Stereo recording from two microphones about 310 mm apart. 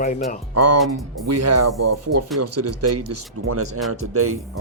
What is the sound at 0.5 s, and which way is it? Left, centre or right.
Speech, right.